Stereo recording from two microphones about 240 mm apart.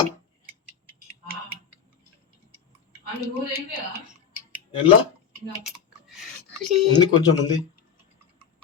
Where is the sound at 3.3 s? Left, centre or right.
Centre.